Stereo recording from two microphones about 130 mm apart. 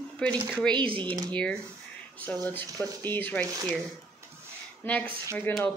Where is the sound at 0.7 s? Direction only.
40° right (ahead or behind).